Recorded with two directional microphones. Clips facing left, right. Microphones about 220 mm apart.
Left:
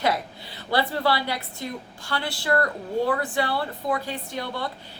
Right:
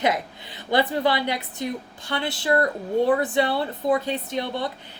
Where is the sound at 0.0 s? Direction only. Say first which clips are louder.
Right 1 dB; 20° right (ahead or behind).